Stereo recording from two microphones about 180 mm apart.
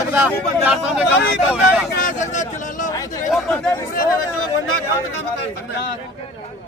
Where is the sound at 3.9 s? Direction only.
50° left (ahead or behind).